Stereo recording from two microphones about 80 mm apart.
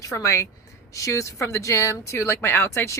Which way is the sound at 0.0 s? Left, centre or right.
Left.